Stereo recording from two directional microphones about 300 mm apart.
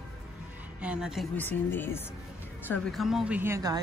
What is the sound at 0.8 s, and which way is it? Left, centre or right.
Speech, centre.